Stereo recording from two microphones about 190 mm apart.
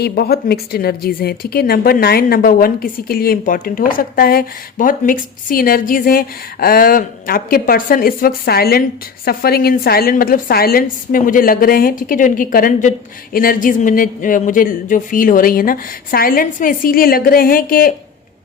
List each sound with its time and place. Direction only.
0.0 s a woman's voice: 55° left (ahead or behind)